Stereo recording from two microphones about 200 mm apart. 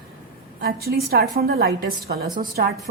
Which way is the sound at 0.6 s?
50° right (ahead or behind).